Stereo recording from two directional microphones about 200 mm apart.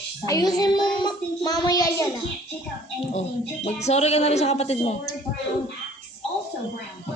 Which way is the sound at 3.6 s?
35° left (ahead or behind).